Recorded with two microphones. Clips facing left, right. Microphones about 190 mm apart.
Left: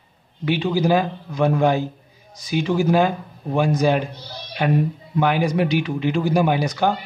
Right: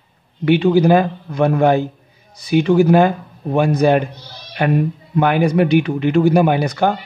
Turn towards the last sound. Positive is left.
turn(degrees=-55)  # may be behind; listen again after turning